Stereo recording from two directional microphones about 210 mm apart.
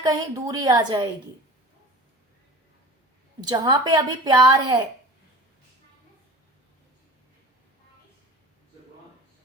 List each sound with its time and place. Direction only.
0.0 s a woman's voice: 20° right (ahead or behind)
3.4 s a woman's voice: 20° right (ahead or behind)